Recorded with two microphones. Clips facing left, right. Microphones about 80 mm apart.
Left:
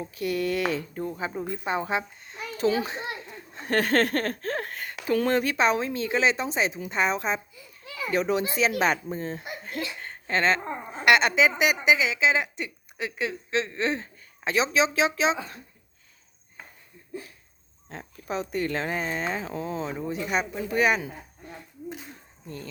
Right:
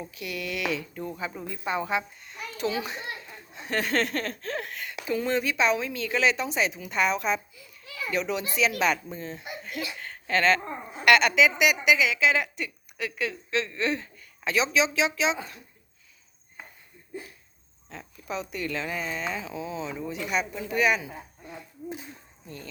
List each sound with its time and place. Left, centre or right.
0.0 s speech: left
3.5 s speech: left
5.1 s a woman's voice: left
17.8 s speech: left
20.0 s speech: left